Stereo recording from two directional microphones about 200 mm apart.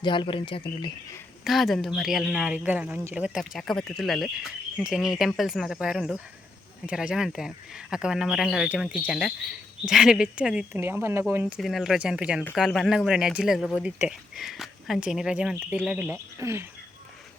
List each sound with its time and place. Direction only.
0.0 s speech: 25° left (ahead or behind)
1.5 s a man's voice: centre (ahead or behind)